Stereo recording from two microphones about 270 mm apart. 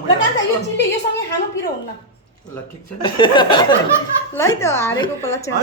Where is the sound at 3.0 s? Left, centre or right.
Centre.